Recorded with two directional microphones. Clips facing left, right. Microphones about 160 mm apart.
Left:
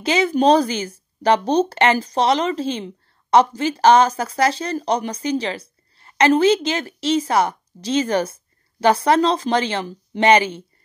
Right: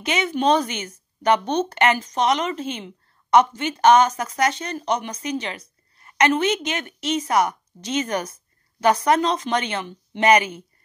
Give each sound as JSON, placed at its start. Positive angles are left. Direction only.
{"t": 0.0, "sound": "speech", "side_deg": 30}